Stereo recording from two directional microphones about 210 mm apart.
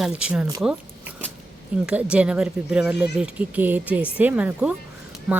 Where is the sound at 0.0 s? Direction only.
5° right (ahead or behind).